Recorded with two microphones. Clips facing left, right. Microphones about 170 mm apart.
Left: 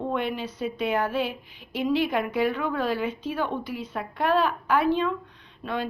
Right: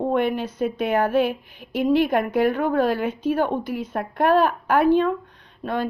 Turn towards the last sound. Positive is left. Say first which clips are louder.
# right 4 dB
turn(degrees=-45)  # may be behind; listen again after turning